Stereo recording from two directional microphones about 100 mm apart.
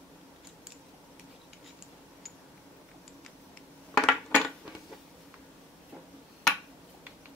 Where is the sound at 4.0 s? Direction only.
5° left (ahead or behind).